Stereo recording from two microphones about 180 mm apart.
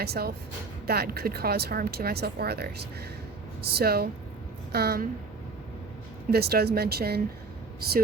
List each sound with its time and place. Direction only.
0.0 s speech: 60° right (ahead or behind)
6.3 s speech: 60° right (ahead or behind)